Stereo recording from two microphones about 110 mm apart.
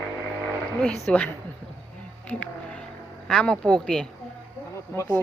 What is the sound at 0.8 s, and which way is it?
Speech, 10° left (ahead or behind).